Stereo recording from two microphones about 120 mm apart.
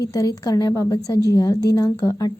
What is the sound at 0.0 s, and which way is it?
A woman's voice, 30° left (ahead or behind).